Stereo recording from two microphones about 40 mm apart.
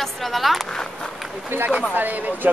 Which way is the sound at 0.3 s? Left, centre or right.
Centre.